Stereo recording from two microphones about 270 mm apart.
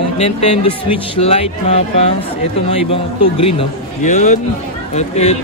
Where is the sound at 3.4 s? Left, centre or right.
Left.